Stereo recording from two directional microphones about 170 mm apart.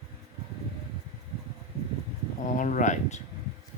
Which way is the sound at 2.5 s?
50° left (ahead or behind).